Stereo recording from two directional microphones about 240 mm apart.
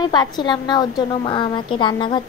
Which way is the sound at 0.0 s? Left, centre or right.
Centre.